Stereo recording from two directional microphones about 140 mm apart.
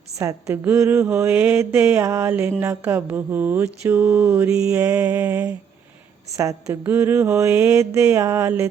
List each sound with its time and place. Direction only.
0.2 s mantra: 20° right (ahead or behind)
6.3 s a woman's voice: 25° right (ahead or behind)
6.8 s mantra: 15° right (ahead or behind)